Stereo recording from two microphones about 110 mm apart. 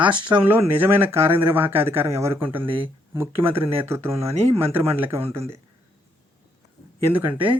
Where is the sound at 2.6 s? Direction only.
50° right (ahead or behind).